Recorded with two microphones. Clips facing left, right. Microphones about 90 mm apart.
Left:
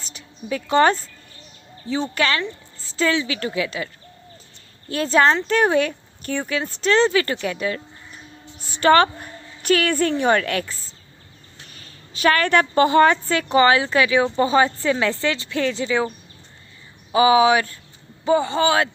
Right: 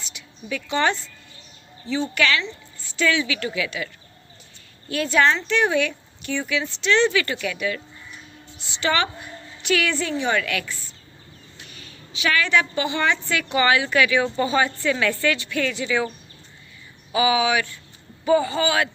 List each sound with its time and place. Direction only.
0.0 s speech: 35° left (ahead or behind)
4.9 s speech: 35° left (ahead or behind)
8.5 s a woman's voice: 45° left (ahead or behind); by 18.9 s 30° left (ahead or behind)